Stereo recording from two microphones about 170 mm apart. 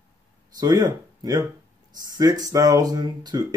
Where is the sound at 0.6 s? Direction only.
25° right (ahead or behind).